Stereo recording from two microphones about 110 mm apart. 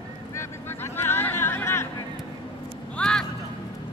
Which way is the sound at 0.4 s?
25° left (ahead or behind).